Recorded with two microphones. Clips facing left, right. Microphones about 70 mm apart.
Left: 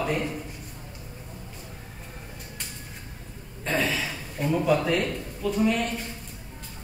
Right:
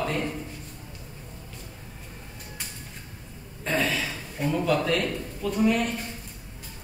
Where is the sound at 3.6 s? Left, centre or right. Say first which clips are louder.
Even; centre.